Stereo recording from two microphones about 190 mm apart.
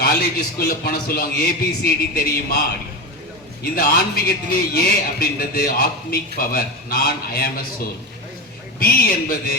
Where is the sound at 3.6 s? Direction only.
50° left (ahead or behind).